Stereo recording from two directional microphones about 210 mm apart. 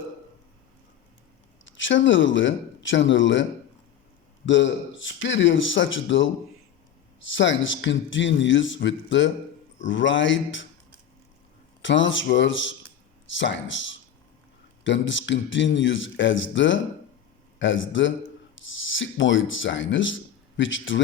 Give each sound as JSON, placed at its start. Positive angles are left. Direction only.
{"t": 1.6, "sound": "a man's voice", "side_deg": 60}
{"t": 4.4, "sound": "a man's voice", "side_deg": 60}
{"t": 11.8, "sound": "a man's voice", "side_deg": 60}